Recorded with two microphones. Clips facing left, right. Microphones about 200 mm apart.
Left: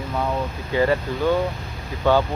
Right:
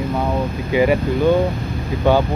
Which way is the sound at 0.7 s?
15° right (ahead or behind).